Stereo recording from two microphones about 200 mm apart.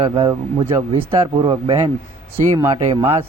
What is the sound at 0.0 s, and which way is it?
Speech, 25° right (ahead or behind).